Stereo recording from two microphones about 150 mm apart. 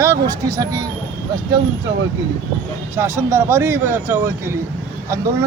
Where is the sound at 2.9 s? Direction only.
15° right (ahead or behind).